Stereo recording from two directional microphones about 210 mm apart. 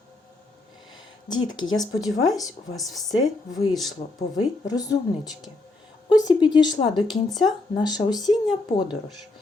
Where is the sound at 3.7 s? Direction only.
Centre (ahead or behind).